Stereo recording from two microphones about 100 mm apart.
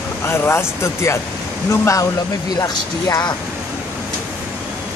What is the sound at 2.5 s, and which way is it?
Speech, 40° left (ahead or behind).